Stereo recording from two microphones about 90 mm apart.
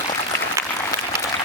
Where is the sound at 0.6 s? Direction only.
30° left (ahead or behind).